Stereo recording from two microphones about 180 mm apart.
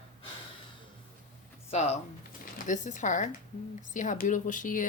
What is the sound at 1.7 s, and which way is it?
Speech, 40° left (ahead or behind).